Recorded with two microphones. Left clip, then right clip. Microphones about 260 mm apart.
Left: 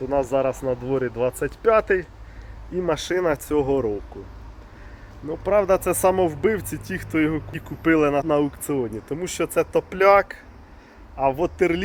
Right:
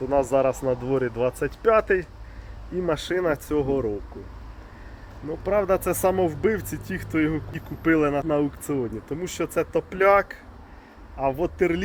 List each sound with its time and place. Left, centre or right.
0.1 s speech: centre
3.6 s speech: left
5.5 s speech: centre
8.3 s speech: left